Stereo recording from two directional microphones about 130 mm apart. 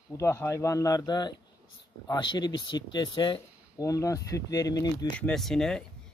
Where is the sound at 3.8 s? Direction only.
25° left (ahead or behind).